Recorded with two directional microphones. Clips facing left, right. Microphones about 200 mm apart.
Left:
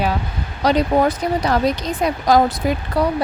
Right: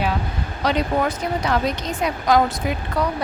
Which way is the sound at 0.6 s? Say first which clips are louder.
Left 5 dB; 35° left (ahead or behind).